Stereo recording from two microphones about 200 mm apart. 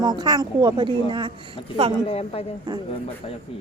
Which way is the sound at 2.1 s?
30° left (ahead or behind).